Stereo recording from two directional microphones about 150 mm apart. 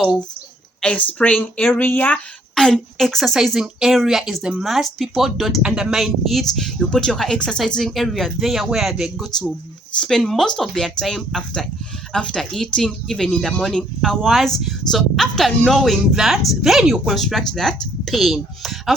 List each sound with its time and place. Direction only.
0.8 s speech: 10° left (ahead or behind)